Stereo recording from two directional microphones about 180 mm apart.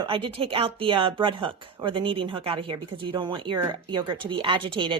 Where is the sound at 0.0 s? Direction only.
30° right (ahead or behind).